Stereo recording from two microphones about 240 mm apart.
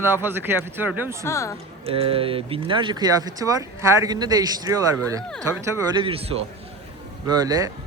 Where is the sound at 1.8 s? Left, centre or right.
Right.